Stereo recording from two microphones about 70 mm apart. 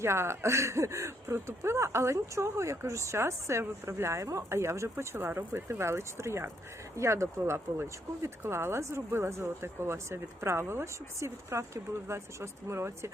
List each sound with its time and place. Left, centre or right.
0.0 s speech: right